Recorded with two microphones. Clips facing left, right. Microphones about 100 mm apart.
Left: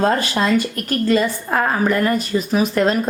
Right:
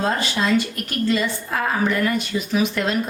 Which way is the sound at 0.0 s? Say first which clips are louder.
Left 4 dB; 45° left (ahead or behind).